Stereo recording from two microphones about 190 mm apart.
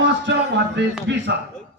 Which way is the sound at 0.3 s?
65° right (ahead or behind).